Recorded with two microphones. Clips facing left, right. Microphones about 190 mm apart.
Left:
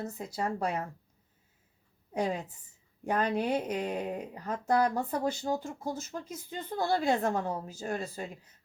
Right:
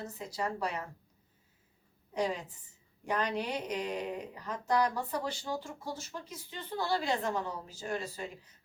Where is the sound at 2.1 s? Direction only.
50° left (ahead or behind).